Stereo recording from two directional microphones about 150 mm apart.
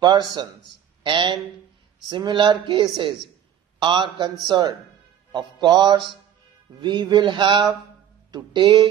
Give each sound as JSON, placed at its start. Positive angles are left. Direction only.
{"t": 0.0, "sound": "music", "side_deg": -30}
{"t": 1.0, "sound": "speech", "side_deg": -30}
{"t": 5.3, "sound": "music", "side_deg": -30}
{"t": 6.8, "sound": "speech", "side_deg": -30}